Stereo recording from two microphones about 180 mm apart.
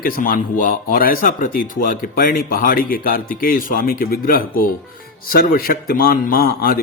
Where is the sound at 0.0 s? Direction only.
50° left (ahead or behind).